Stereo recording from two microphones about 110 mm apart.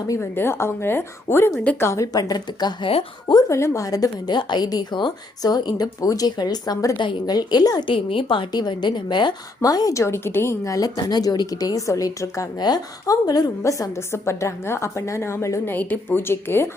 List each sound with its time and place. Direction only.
0.1 s a woman's voice: 20° left (ahead or behind); by 2.9 s 40° left (ahead or behind)
3.5 s a woman's voice: 25° left (ahead or behind)